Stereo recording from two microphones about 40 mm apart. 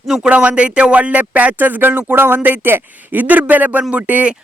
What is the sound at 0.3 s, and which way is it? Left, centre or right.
Speech, right.